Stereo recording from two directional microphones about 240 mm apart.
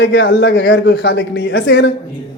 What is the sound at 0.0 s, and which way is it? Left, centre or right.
A man's voice, left.